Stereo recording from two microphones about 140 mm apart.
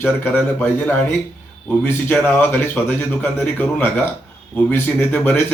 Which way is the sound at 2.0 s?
10° left (ahead or behind).